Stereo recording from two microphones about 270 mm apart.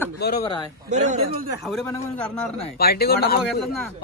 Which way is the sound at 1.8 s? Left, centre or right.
Centre.